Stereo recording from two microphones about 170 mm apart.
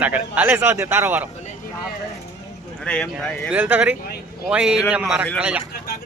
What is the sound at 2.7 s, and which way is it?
Speech, 5° left (ahead or behind).